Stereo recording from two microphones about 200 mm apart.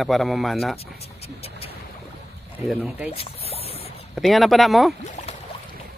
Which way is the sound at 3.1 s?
30° left (ahead or behind).